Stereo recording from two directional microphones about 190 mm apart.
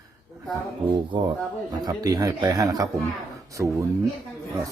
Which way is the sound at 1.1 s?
25° right (ahead or behind).